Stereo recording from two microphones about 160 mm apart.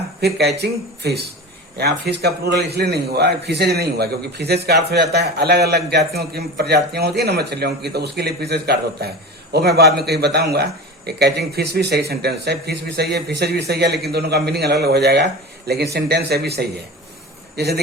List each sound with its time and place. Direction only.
0.2 s a man's voice: 90° right